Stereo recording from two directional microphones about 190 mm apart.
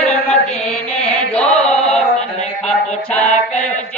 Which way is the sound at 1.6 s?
35° left (ahead or behind).